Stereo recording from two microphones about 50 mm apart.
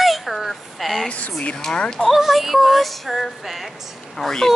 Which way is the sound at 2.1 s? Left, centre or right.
Centre.